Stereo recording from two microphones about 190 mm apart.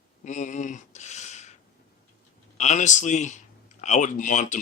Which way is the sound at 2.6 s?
40° left (ahead or behind).